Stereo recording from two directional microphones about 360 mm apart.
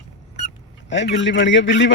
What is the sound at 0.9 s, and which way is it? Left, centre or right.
A man's voice, left.